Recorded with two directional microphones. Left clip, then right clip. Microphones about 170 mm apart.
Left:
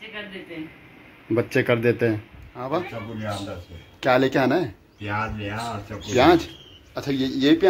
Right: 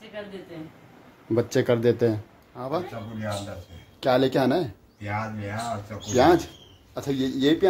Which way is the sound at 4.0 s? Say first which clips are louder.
Left 2 dB; 5° right (ahead or behind).